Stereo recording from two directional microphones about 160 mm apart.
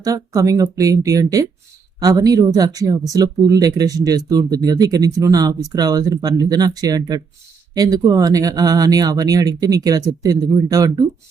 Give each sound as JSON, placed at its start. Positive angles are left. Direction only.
{"t": 0.0, "sound": "speech", "side_deg": -20}